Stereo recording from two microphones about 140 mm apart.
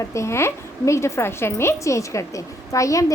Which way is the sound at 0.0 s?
20° left (ahead or behind).